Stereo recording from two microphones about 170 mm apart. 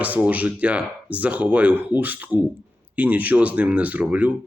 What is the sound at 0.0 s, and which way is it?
Speech, 10° right (ahead or behind).